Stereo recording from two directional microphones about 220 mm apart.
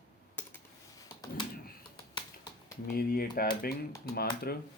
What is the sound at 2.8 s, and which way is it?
Speech, 45° left (ahead or behind).